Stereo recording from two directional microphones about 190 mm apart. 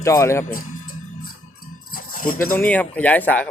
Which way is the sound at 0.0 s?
15° left (ahead or behind).